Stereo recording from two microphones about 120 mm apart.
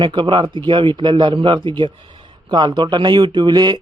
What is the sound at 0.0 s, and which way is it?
Speech, 40° right (ahead or behind).